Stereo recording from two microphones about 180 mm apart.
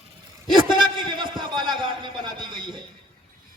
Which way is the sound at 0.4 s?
25° right (ahead or behind).